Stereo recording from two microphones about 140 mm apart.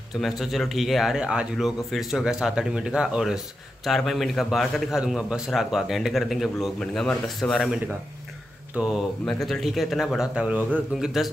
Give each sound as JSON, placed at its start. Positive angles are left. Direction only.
{"t": 0.2, "sound": "a man's voice", "side_deg": 0}
{"t": 8.7, "sound": "a man's voice", "side_deg": -5}